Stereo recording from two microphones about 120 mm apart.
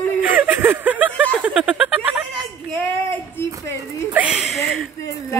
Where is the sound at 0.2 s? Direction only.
15° right (ahead or behind).